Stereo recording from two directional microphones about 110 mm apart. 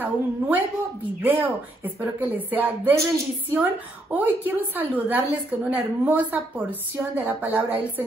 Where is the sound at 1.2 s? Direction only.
15° right (ahead or behind).